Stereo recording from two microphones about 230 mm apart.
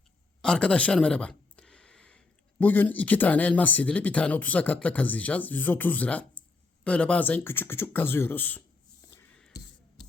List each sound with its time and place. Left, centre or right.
0.4 s speech: centre